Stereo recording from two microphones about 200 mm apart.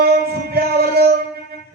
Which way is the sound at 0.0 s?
50° right (ahead or behind).